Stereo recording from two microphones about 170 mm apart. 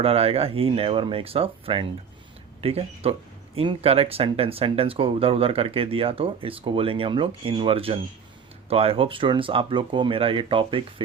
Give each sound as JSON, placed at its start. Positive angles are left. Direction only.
{"t": 0.0, "sound": "speech", "side_deg": -35}